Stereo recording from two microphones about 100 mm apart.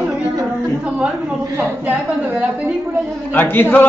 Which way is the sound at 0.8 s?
5° right (ahead or behind).